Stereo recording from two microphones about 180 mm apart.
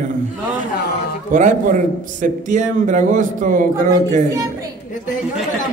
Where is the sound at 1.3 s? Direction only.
45° right (ahead or behind).